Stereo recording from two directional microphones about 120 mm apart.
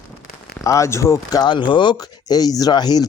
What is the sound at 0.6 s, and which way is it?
Speech, 25° left (ahead or behind).